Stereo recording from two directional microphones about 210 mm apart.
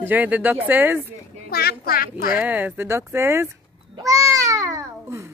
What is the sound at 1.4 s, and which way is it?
Speech, 45° left (ahead or behind).